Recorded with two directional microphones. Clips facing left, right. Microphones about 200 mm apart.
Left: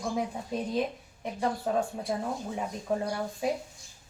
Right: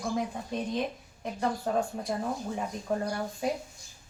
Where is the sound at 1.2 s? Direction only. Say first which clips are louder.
Even; 5° left (ahead or behind).